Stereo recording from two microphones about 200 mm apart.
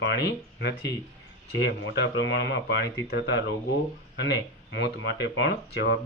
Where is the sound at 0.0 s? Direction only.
60° left (ahead or behind).